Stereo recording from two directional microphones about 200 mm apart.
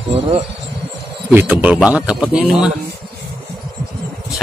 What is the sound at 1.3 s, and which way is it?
Speech, 10° right (ahead or behind).